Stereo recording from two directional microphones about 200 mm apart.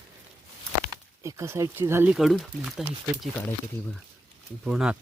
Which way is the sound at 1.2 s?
15° right (ahead or behind).